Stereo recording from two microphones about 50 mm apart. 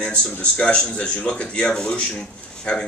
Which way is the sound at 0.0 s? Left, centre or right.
Left.